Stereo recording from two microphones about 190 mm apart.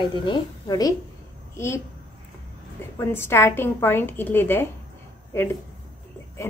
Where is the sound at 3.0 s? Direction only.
15° left (ahead or behind).